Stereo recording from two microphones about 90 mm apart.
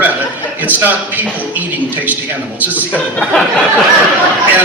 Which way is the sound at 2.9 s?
10° left (ahead or behind).